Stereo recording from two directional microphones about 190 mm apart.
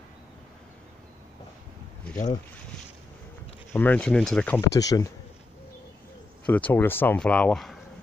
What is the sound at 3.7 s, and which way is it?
Speech, 5° left (ahead or behind).